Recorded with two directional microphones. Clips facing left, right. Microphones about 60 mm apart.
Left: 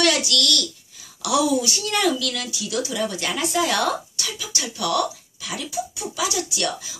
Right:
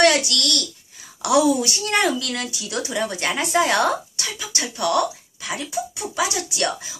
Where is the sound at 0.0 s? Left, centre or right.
Right.